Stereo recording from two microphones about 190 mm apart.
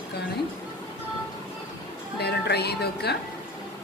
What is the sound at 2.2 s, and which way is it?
Speech, 60° left (ahead or behind).